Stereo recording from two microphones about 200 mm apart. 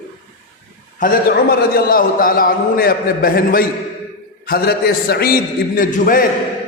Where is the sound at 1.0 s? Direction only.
40° left (ahead or behind).